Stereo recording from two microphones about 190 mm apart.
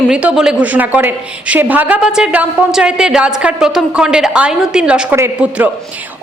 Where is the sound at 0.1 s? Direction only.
5° right (ahead or behind).